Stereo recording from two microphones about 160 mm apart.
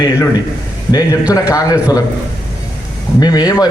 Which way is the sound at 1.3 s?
20° left (ahead or behind).